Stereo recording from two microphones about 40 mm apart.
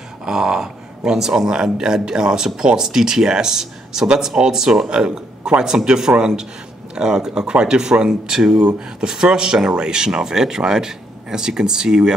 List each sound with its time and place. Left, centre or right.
0.2 s speech: centre